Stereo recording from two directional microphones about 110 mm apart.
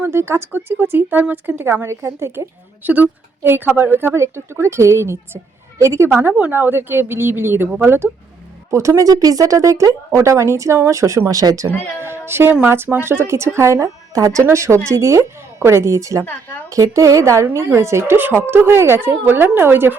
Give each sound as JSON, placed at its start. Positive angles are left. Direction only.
{"t": 0.0, "sound": "a woman's voice", "side_deg": -25}
{"t": 11.9, "sound": "a sound", "side_deg": -20}
{"t": 12.6, "sound": "a woman's voice", "side_deg": -20}
{"t": 16.2, "sound": "a woman's voice", "side_deg": 15}
{"t": 16.6, "sound": "a woman's voice", "side_deg": -30}